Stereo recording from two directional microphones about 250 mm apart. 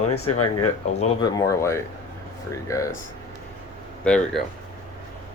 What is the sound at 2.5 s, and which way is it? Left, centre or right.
Speech, centre.